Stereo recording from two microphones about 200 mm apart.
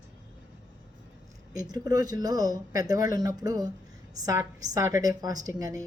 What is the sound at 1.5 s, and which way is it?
Speech, 20° right (ahead or behind).